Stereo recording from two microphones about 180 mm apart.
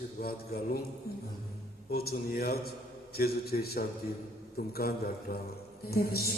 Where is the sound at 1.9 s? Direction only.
60° left (ahead or behind).